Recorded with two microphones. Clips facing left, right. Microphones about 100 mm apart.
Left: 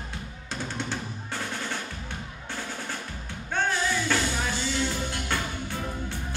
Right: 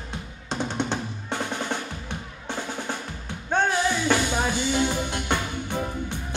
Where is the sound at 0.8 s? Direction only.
20° right (ahead or behind).